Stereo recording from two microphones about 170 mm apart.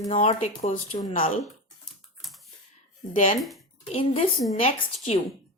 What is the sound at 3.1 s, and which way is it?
Speech, 50° left (ahead or behind).